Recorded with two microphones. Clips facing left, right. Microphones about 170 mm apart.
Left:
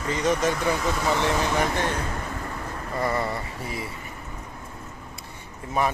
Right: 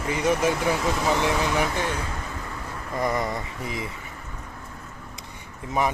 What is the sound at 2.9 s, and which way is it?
Speech, 15° right (ahead or behind).